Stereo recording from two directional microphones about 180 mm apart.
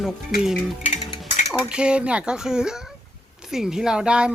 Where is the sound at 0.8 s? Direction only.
45° left (ahead or behind).